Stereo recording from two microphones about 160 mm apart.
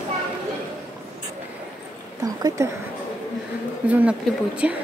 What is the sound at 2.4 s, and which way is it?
Speech, 20° right (ahead or behind).